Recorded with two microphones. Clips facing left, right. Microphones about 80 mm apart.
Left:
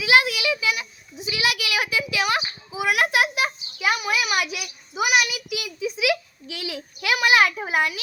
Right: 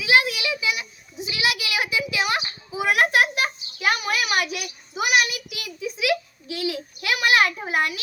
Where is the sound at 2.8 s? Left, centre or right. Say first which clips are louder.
Right 1 dB; right.